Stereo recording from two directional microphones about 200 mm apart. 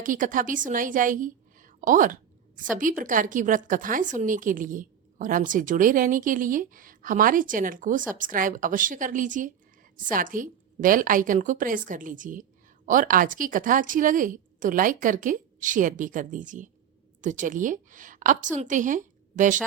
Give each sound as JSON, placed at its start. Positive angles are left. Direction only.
{"t": 0.0, "sound": "a woman's voice", "side_deg": -40}